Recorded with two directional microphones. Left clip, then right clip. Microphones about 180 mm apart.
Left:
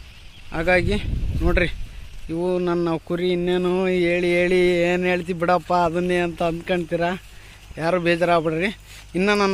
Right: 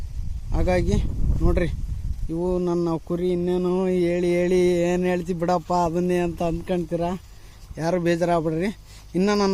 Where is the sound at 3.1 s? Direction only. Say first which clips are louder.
Left 2 dB; centre (ahead or behind).